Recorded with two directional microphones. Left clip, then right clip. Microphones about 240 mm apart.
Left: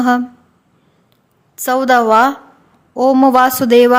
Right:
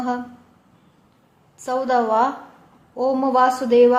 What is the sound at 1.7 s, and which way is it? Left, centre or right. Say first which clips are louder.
Speech: left 8 dB; left.